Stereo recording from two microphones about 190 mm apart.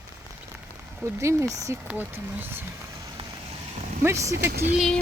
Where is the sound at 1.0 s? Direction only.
15° right (ahead or behind).